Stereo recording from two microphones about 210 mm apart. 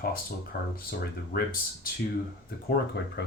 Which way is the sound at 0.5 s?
45° left (ahead or behind).